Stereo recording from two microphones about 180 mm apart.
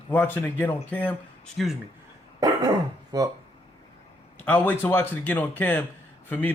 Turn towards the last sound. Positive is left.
turn(degrees=10)  # may be behind; listen again after turning